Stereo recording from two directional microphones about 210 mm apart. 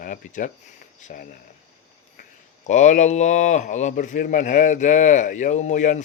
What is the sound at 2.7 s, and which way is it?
Speech, 35° left (ahead or behind).